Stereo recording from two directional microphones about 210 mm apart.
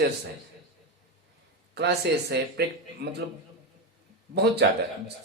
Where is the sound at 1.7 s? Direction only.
50° right (ahead or behind).